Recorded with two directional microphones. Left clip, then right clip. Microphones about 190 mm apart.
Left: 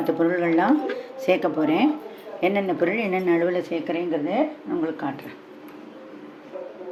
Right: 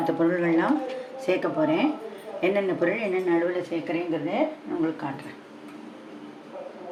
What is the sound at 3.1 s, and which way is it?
Speech, 55° left (ahead or behind).